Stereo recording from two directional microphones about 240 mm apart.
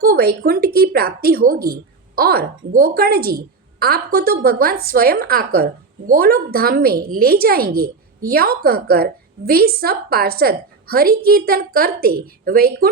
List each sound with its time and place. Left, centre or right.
0.0 s a woman's voice: right